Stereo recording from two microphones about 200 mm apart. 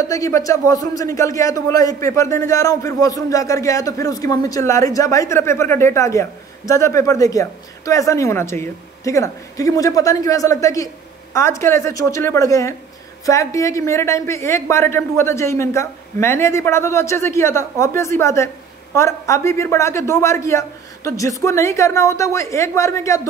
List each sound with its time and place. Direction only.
0.1 s speech: 15° left (ahead or behind)